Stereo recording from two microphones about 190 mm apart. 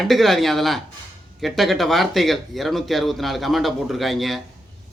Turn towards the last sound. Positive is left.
turn(degrees=0)  # may be behind; listen again after turning